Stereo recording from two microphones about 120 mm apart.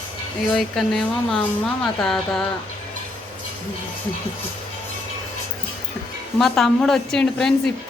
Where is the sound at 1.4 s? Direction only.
10° left (ahead or behind).